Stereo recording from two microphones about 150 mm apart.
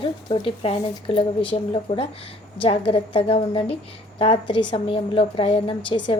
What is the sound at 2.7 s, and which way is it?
A woman's voice, 40° left (ahead or behind).